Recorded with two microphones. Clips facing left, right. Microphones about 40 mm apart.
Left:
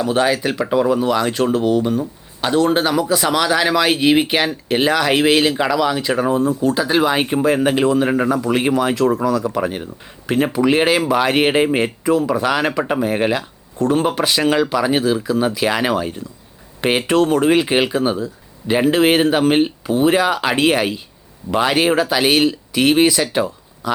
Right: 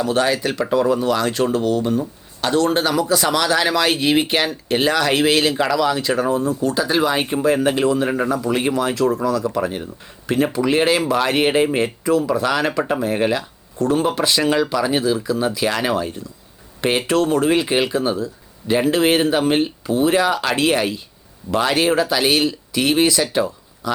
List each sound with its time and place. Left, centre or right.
0.0 s speech: centre